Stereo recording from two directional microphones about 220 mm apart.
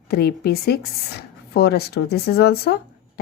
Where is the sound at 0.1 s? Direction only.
45° left (ahead or behind).